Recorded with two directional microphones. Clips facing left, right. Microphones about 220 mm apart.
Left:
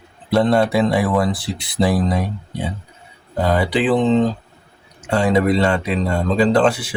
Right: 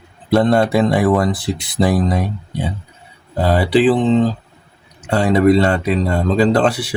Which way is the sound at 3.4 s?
30° right (ahead or behind).